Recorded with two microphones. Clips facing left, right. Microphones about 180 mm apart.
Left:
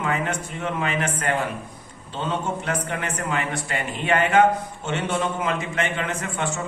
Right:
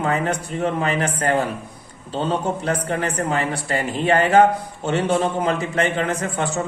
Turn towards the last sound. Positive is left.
turn(degrees=-35)  # may be behind; listen again after turning